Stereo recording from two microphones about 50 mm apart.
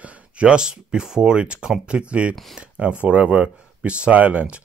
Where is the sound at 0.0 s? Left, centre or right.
Right.